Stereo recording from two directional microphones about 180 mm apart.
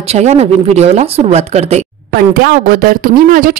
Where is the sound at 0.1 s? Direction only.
35° right (ahead or behind).